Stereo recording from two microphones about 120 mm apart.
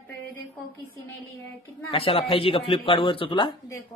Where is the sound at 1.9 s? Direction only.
50° left (ahead or behind).